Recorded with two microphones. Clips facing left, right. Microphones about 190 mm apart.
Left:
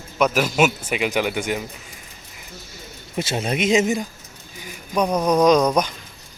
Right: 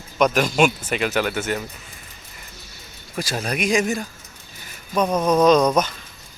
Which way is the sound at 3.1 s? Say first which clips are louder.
Left 2 dB; 25° left (ahead or behind).